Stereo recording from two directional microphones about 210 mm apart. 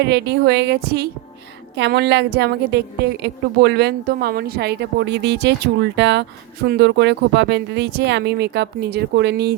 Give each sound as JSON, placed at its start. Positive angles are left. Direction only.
{"t": 0.0, "sound": "a woman's voice", "side_deg": -50}